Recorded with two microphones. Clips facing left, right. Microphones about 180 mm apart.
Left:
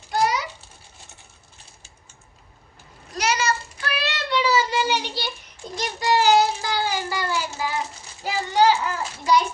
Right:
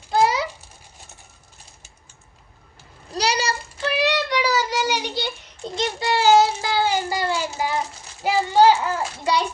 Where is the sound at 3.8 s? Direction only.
20° right (ahead or behind).